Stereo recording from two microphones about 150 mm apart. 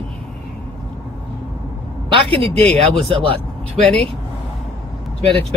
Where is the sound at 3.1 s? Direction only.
35° right (ahead or behind).